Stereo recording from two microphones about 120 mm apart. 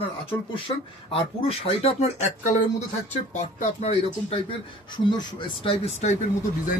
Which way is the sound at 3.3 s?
60° left (ahead or behind).